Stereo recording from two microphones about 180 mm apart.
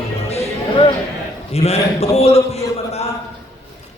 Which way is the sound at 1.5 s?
35° left (ahead or behind).